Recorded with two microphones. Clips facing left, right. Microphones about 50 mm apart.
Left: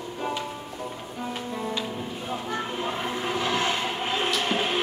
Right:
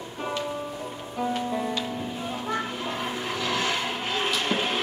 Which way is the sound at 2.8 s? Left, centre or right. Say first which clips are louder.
Left 1 dB; left.